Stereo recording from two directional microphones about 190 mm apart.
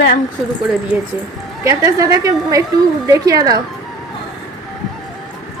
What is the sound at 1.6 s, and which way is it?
A woman's voice, 15° right (ahead or behind).